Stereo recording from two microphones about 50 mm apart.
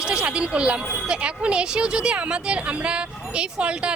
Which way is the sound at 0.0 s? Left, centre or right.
Centre.